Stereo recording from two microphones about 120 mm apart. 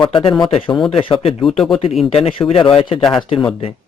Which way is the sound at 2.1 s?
55° left (ahead or behind).